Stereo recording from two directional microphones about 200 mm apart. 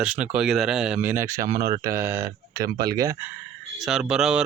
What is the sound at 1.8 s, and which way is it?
Speech, 15° right (ahead or behind).